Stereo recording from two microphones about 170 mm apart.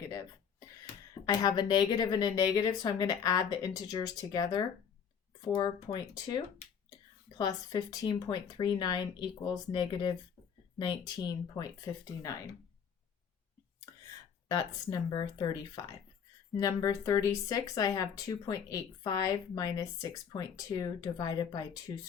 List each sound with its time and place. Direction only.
1.2 s speech: 25° left (ahead or behind)
13.9 s a sound: 20° left (ahead or behind)
14.4 s speech: 20° left (ahead or behind)